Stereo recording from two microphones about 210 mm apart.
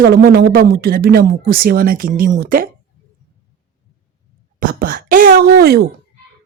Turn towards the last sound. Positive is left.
turn(degrees=-50)  # may be behind; listen again after turning